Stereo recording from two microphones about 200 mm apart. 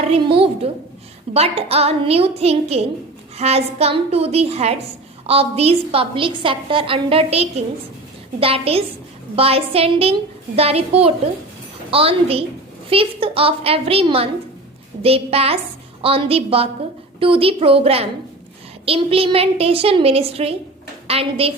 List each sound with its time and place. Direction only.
0.0 s a woman's voice: 30° right (ahead or behind)